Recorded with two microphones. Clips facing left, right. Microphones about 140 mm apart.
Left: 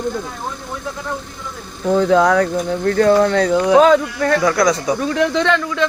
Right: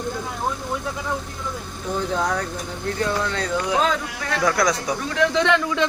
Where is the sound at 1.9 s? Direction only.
90° left; by 4.4 s 50° left (ahead or behind).